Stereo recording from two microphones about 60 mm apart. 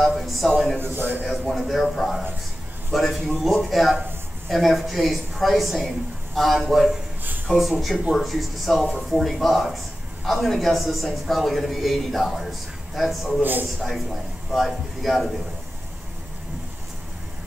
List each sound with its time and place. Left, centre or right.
0.0 s a sound: centre
0.7 s a man's voice: right
1.5 s a man's voice: centre
13.4 s a man's voice: right
13.7 s a man's voice: centre